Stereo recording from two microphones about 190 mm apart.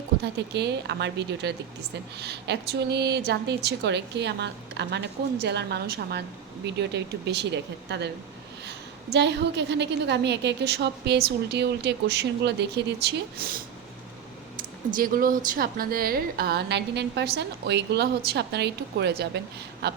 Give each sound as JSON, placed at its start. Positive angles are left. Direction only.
{"t": 0.2, "sound": "a woman's voice", "side_deg": -60}